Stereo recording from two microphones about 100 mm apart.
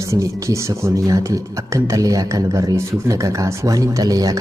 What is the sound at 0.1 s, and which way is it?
A man's voice, 30° right (ahead or behind).